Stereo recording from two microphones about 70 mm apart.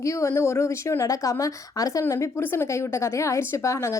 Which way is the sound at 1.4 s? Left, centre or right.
Left.